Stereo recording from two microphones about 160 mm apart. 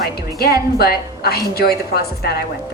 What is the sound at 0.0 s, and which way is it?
Music, 75° left (ahead or behind).